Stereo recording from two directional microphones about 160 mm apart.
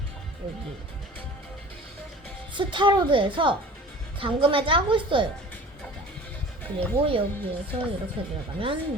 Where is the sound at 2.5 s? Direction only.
30° right (ahead or behind).